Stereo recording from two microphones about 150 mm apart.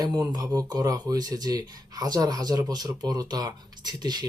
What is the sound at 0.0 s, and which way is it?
Speech, 25° right (ahead or behind).